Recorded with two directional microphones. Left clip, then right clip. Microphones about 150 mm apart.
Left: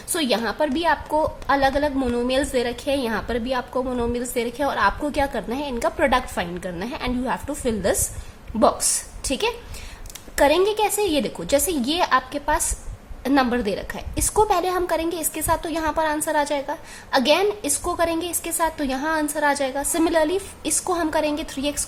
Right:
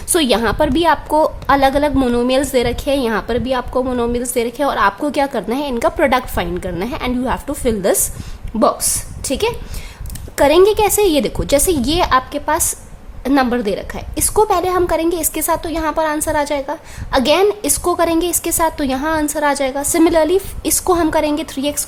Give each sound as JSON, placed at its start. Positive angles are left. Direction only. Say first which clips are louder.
{"t": 0.1, "sound": "a woman's voice", "louder": "right 8 dB", "side_deg": -35}